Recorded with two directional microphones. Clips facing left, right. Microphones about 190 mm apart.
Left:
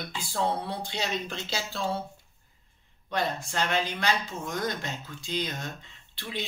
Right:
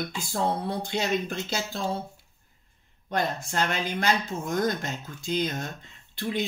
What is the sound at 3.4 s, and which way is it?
Speech, 45° right (ahead or behind).